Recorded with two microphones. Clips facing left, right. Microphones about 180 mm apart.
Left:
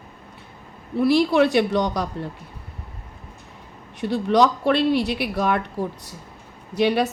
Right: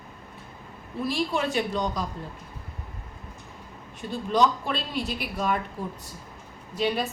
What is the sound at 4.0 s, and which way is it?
A woman's voice, 70° left (ahead or behind).